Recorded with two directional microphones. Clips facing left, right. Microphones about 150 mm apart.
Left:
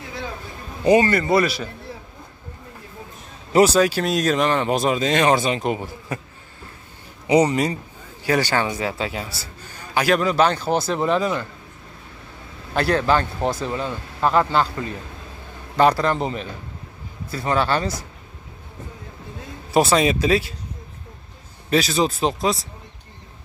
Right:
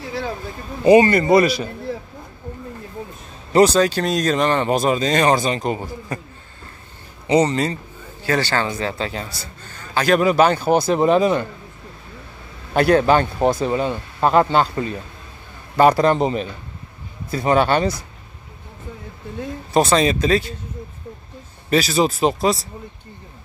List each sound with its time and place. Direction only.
0.8 s speech: 15° right (ahead or behind)
3.5 s speech: 5° left (ahead or behind)
7.2 s speech: 10° left (ahead or behind)
10.1 s speech: 10° right (ahead or behind)
12.7 s speech: 15° right (ahead or behind)
15.7 s a man's voice: 10° right (ahead or behind)
16.0 s speech: 20° right (ahead or behind)
19.7 s speech: 5° left (ahead or behind)
21.6 s speech: centre (ahead or behind)